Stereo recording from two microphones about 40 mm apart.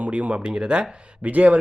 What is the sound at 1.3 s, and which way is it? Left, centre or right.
Speech, right.